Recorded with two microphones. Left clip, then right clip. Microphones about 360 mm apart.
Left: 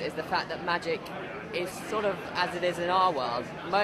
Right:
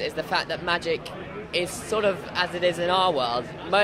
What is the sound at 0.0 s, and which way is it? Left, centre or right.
Speech, right.